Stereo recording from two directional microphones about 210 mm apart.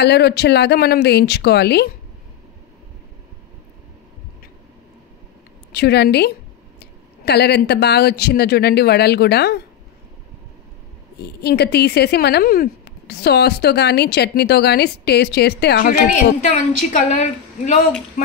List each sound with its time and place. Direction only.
0.0 s speech: 50° left (ahead or behind)
5.7 s speech: 50° left (ahead or behind)
11.2 s speech: 50° left (ahead or behind)
16.3 s a woman's voice: 35° left (ahead or behind)